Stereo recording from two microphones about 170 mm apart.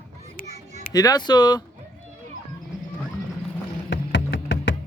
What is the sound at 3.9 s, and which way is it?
Music, 90° left.